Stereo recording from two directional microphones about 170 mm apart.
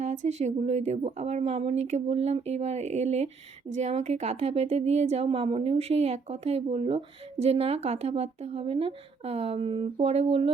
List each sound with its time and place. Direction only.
0.0 s speech: 45° right (ahead or behind)